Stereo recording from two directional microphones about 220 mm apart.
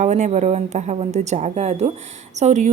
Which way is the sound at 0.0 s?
30° right (ahead or behind).